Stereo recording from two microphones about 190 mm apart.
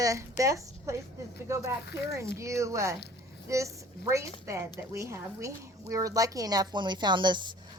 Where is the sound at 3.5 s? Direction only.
15° right (ahead or behind).